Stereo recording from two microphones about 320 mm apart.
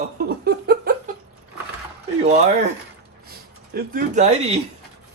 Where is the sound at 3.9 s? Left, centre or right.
Right.